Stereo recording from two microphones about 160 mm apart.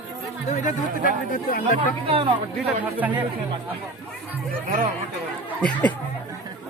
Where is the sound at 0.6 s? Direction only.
55° left (ahead or behind).